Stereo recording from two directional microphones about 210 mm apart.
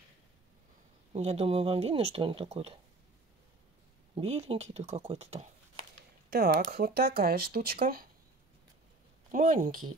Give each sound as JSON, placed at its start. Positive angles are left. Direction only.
{"t": 1.1, "sound": "speech", "side_deg": -30}
{"t": 4.1, "sound": "speech", "side_deg": -30}
{"t": 6.3, "sound": "speech", "side_deg": -45}
{"t": 9.3, "sound": "speech", "side_deg": -40}